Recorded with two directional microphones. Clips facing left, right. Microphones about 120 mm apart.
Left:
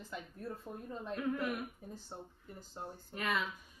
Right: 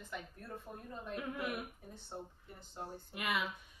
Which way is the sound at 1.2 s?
10° right (ahead or behind).